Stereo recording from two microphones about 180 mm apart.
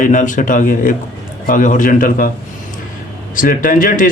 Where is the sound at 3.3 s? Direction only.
50° left (ahead or behind).